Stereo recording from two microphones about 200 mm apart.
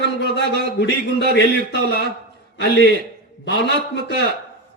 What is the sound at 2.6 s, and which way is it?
Speech, 60° left (ahead or behind).